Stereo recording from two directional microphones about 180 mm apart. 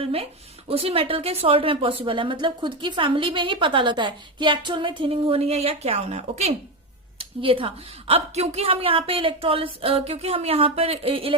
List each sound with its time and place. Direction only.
0.0 s a woman's voice: 30° right (ahead or behind)